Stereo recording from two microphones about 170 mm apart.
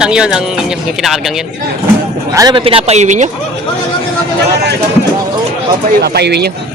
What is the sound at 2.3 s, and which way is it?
Speech, 20° right (ahead or behind).